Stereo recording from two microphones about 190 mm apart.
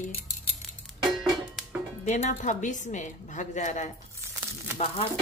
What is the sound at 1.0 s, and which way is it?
Music, centre (ahead or behind).